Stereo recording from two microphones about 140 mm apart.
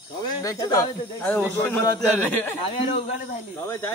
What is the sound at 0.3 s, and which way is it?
A man's voice, 25° left (ahead or behind).